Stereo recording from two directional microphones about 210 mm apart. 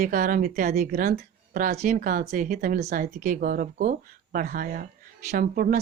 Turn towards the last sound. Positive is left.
turn(degrees=-40)  # may be behind; listen again after turning